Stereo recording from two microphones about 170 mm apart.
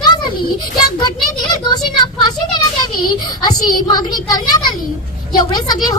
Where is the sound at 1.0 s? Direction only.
25° left (ahead or behind).